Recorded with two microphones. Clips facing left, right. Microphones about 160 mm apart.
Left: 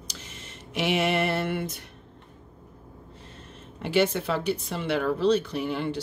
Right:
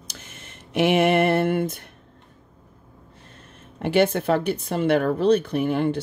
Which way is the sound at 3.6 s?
55° right (ahead or behind).